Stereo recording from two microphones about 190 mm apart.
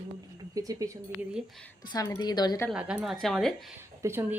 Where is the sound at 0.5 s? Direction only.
20° right (ahead or behind).